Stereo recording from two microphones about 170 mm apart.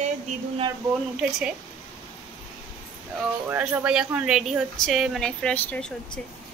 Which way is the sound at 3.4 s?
10° right (ahead or behind).